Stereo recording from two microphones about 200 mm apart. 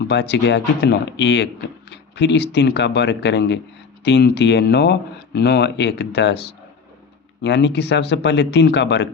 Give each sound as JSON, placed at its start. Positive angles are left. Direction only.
{"t": 0.1, "sound": "speech", "side_deg": 60}